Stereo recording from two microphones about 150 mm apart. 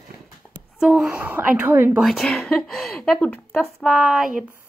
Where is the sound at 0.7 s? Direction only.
Centre (ahead or behind).